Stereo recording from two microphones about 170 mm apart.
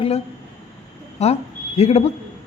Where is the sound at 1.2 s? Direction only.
40° left (ahead or behind).